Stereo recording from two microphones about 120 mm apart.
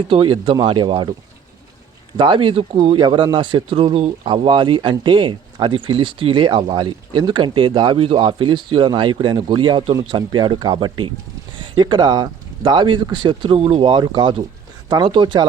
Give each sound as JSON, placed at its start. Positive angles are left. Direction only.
{"t": 0.1, "sound": "speech", "side_deg": -45}
{"t": 2.1, "sound": "speech", "side_deg": -45}
{"t": 13.9, "sound": "speech", "side_deg": -40}